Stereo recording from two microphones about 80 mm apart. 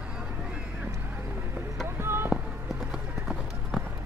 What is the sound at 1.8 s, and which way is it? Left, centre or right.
Music, right.